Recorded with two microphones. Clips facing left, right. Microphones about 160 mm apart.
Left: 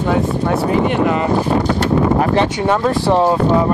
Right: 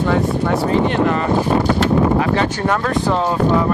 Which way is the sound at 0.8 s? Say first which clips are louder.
Left 1 dB; 10° left (ahead or behind).